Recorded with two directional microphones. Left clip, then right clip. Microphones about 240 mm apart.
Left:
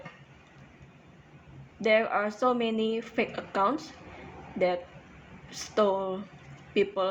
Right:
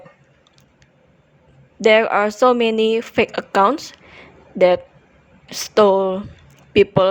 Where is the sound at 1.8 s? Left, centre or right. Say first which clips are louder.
Right 11 dB; right.